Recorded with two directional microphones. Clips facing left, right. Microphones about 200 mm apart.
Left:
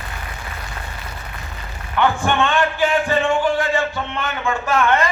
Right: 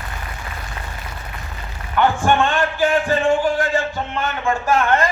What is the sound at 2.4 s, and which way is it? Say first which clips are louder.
Speech: even; 45° right (ahead or behind).